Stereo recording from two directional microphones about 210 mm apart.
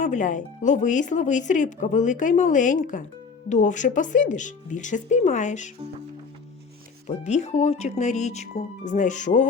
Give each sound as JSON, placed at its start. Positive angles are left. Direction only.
{"t": 0.0, "sound": "speech", "side_deg": 35}
{"t": 7.3, "sound": "speech", "side_deg": 35}